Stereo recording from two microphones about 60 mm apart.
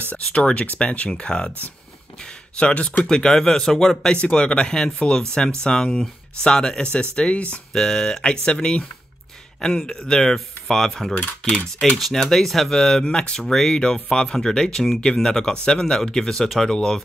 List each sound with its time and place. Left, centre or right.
0.0 s speech: left
4.1 s speech: centre
11.1 s speech: left
12.0 s speech: centre